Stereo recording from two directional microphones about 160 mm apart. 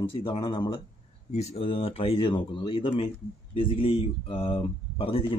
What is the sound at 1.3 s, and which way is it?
Speech, 45° left (ahead or behind).